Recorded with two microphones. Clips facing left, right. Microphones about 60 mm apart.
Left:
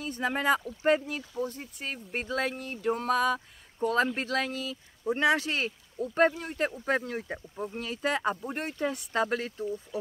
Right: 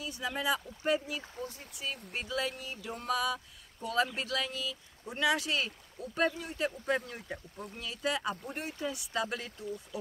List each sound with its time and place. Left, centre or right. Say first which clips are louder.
0.0 s speech: left 6 dB; left